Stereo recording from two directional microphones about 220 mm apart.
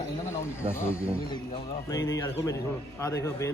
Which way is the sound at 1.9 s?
15° left (ahead or behind).